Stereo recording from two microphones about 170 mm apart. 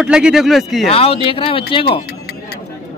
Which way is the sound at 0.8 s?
35° left (ahead or behind).